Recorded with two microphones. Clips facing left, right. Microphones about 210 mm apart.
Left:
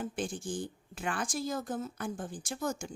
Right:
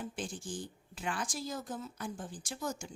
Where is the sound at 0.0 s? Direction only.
50° left (ahead or behind).